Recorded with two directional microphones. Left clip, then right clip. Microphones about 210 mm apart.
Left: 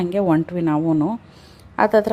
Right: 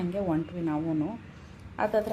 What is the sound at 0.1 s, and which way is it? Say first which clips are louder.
Speech: left 11 dB; 50° left (ahead or behind).